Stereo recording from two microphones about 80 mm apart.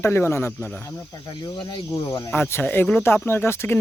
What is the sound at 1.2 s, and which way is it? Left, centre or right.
Speech, left.